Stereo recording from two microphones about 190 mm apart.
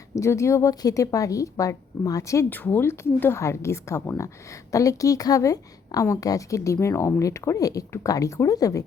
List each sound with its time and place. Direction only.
0.2 s a woman's voice: 15° left (ahead or behind)